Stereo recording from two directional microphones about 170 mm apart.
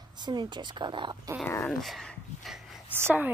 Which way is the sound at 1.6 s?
Centre (ahead or behind).